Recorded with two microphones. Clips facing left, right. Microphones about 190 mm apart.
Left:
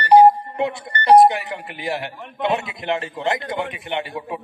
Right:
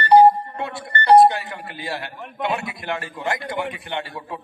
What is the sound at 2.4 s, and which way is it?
A man's voice, 20° left (ahead or behind).